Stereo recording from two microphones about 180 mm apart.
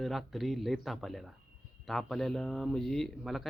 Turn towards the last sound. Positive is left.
turn(degrees=0)  # may be behind; listen again after turning